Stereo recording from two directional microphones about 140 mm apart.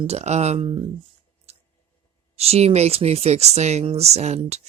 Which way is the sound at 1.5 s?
50° right (ahead or behind).